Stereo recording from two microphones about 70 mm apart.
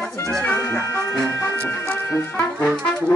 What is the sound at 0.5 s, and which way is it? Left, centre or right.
Music, left.